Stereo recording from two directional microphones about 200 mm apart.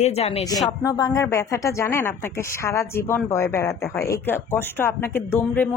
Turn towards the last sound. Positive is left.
turn(degrees=10)  # may be behind; listen again after turning